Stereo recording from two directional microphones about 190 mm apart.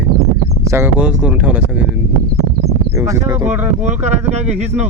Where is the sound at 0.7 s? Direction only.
10° right (ahead or behind).